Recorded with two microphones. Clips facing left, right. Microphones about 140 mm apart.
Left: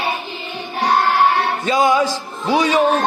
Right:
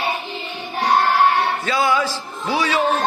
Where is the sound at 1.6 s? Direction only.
20° left (ahead or behind).